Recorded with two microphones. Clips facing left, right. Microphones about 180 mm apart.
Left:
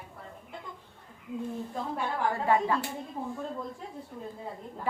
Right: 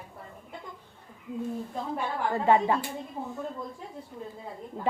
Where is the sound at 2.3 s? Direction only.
25° right (ahead or behind).